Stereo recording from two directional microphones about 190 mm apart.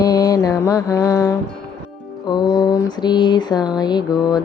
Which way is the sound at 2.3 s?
20° left (ahead or behind).